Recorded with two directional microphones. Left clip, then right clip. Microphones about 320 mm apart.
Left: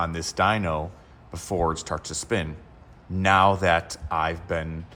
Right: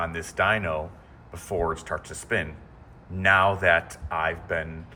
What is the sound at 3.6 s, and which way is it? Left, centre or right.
Speech, centre.